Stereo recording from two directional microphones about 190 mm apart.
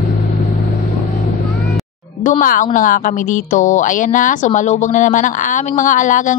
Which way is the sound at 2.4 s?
45° left (ahead or behind).